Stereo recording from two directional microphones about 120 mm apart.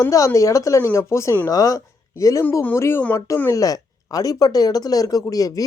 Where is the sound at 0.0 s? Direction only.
25° left (ahead or behind).